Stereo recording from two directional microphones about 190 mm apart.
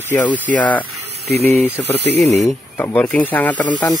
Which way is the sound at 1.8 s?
15° left (ahead or behind).